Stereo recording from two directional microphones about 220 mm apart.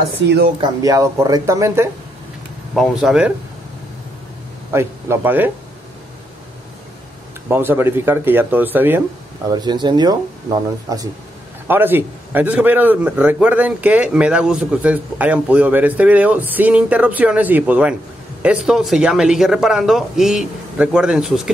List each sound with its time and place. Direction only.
0.6 s a man's voice: 15° right (ahead or behind)
2.7 s speech: centre (ahead or behind)
4.7 s a man's voice: 10° right (ahead or behind)
7.4 s a man's voice: 10° right (ahead or behind)
9.5 s a man's voice: 20° right (ahead or behind); by 21.4 s centre (ahead or behind)